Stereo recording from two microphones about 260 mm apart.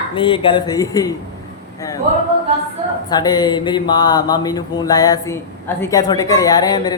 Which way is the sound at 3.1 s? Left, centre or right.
Centre.